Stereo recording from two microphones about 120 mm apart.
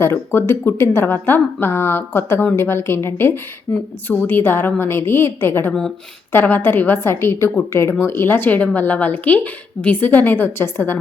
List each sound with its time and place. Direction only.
0.0 s a woman's voice: 20° left (ahead or behind)